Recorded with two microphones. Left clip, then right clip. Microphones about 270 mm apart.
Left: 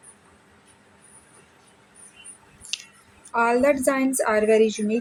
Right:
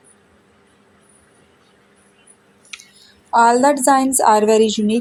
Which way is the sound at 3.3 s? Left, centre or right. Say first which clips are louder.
Right 7 dB; centre.